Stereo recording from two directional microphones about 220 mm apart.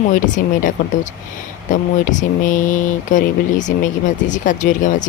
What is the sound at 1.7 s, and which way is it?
Speech, 35° left (ahead or behind).